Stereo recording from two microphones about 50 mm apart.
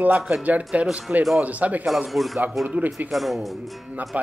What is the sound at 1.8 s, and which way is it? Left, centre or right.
Speech, centre.